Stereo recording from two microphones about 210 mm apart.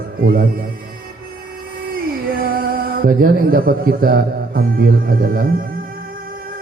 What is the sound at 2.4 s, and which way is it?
Speech, 45° right (ahead or behind).